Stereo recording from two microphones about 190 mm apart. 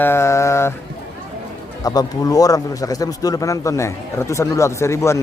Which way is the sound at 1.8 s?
20° left (ahead or behind).